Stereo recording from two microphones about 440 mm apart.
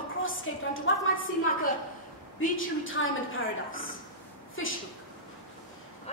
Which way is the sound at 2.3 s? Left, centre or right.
Left.